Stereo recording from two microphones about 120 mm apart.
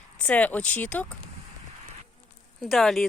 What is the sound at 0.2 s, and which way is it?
Speech, 10° left (ahead or behind).